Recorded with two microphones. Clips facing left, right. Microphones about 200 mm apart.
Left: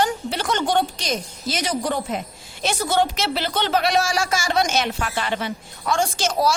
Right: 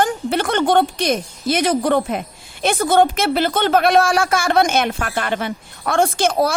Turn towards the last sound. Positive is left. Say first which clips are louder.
# right 5 dB
turn(degrees=-55)  # may be behind; listen again after turning